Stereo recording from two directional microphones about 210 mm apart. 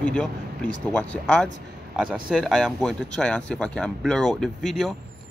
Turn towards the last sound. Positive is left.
turn(degrees=0)  # may be behind; listen again after turning